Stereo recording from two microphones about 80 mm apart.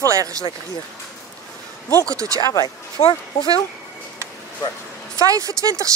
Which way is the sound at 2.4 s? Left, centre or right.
Left.